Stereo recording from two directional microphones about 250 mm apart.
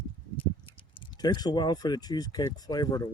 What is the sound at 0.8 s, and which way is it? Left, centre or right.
Speech, centre.